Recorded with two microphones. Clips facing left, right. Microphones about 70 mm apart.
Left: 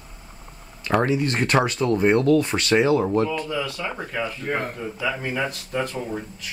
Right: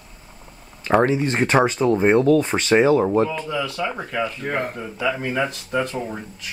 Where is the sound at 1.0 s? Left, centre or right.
Centre.